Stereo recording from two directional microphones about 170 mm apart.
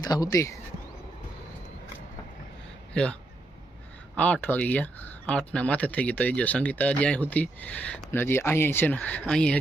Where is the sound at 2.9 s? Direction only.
5° left (ahead or behind).